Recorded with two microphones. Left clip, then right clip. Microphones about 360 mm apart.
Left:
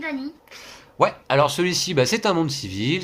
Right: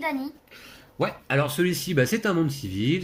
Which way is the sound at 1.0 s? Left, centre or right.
Centre.